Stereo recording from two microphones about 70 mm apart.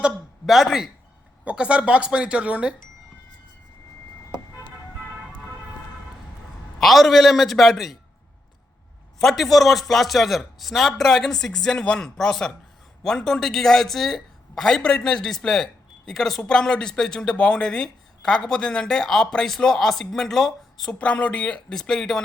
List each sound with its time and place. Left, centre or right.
0.4 s speech: centre
1.5 s speech: centre
6.7 s speech: centre
9.1 s speech: centre
21.0 s speech: centre